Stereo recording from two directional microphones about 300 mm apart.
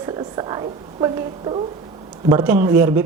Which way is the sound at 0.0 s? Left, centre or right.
Centre.